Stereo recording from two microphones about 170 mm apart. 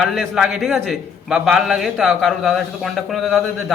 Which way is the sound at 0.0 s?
Centre (ahead or behind).